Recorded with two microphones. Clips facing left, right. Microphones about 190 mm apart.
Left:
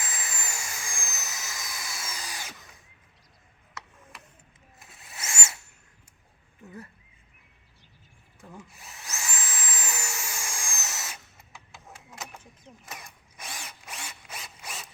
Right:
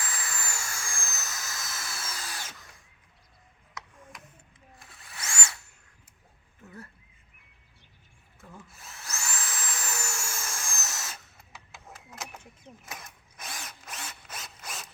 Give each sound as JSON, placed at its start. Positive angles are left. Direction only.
{"t": 0.0, "sound": "a sound", "side_deg": 20}
{"t": 4.9, "sound": "wood", "side_deg": 20}
{"t": 8.6, "sound": "drill", "side_deg": 15}
{"t": 11.3, "sound": "a sound", "side_deg": 0}
{"t": 12.1, "sound": "mechanisms", "side_deg": -5}
{"t": 12.9, "sound": "drill", "side_deg": 5}
{"t": 14.3, "sound": "zipper", "side_deg": 5}